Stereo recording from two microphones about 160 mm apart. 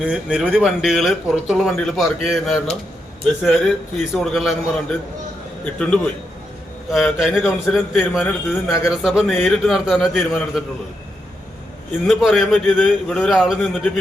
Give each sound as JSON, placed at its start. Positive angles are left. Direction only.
{"t": 0.0, "sound": "a man's voice", "side_deg": -5}
{"t": 12.0, "sound": "a man's voice", "side_deg": 0}